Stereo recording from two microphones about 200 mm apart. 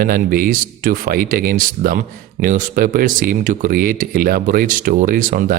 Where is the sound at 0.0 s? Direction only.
45° right (ahead or behind).